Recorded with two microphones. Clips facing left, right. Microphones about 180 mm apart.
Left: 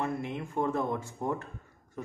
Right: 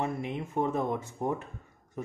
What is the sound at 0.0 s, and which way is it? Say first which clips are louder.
Speech: right 1 dB; 20° right (ahead or behind).